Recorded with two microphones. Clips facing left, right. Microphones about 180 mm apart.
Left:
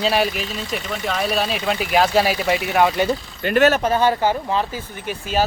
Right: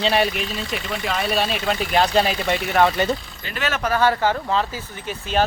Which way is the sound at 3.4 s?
60° left (ahead or behind).